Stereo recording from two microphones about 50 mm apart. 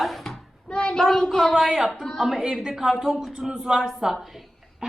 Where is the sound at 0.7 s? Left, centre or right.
Left.